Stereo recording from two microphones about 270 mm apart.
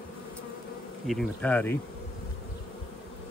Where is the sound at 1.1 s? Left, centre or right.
Centre.